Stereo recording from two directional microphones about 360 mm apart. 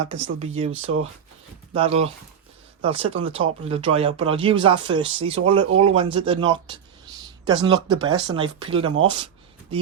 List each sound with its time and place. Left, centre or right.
0.0 s speech: centre
1.7 s speech: centre